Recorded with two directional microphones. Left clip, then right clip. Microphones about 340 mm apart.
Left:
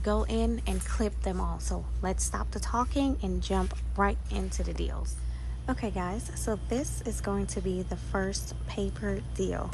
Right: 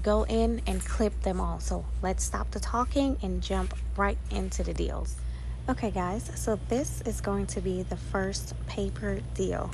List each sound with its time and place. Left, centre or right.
0.0 s a woman's voice: centre